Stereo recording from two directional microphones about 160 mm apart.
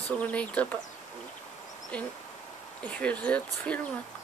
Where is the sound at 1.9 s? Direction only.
5° left (ahead or behind).